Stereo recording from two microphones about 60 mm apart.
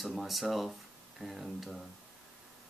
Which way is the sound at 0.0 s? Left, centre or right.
Centre.